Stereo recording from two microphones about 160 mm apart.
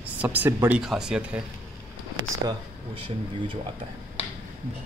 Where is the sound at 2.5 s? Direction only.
35° right (ahead or behind).